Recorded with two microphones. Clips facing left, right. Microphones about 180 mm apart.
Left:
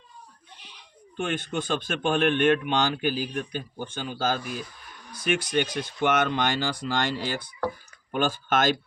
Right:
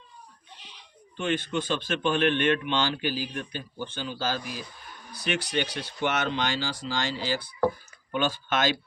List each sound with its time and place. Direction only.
1.1 s speech: 50° left (ahead or behind)